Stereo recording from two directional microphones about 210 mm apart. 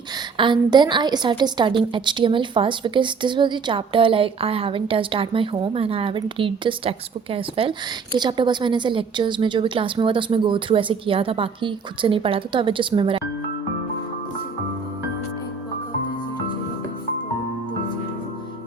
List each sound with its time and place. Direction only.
0.3 s a woman's voice: 20° right (ahead or behind)